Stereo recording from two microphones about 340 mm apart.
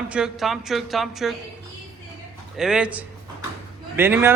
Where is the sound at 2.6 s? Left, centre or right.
Centre.